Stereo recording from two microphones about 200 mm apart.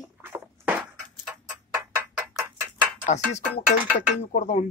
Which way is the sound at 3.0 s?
40° left (ahead or behind).